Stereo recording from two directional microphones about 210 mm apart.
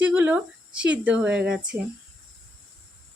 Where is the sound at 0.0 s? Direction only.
5° right (ahead or behind).